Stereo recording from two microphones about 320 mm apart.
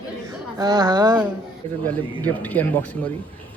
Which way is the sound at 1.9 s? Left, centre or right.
Centre.